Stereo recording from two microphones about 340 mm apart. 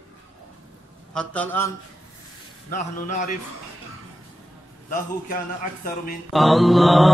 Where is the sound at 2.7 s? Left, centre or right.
Left.